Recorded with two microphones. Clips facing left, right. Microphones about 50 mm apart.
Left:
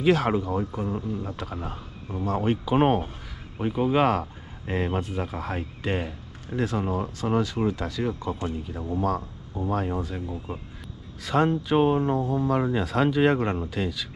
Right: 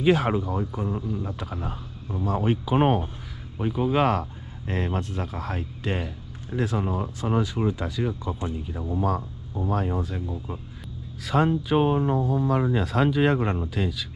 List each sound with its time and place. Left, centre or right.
0.0 s speech: centre
0.3 s speech: centre
3.5 s speech: centre
10.3 s speech: left
11.2 s speech: centre